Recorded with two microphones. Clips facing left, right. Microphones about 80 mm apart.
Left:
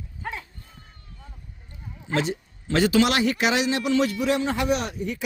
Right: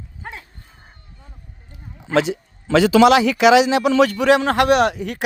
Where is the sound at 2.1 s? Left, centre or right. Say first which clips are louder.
Right 7 dB; right.